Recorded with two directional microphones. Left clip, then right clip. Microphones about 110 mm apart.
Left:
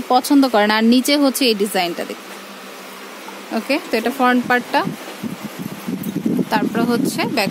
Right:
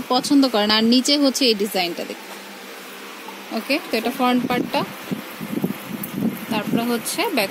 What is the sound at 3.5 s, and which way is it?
Speech, 5° left (ahead or behind).